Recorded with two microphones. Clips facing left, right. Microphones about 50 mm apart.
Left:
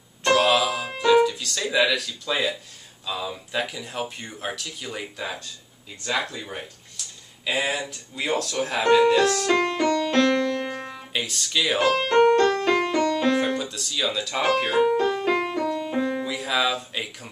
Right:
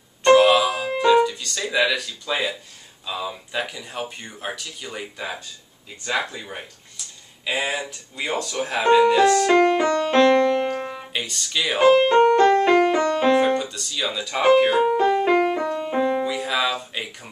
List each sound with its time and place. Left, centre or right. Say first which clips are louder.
0.2 s music: right 5 dB; centre
3.1 s speech: right 1 dB; centre
7.0 s a sound: even; centre
7.4 s speech: even; centre
10.0 s music: right 5 dB; right
11.1 s speech: left 1 dB; centre
11.8 s speech: right 9 dB; centre
12.4 s music: right 5 dB; centre
13.4 s speech: right 5 dB; centre
14.4 s music: right 5 dB; centre
16.3 s speech: right 1 dB; centre